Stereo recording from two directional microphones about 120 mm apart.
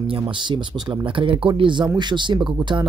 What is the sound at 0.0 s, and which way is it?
Speech, 45° right (ahead or behind).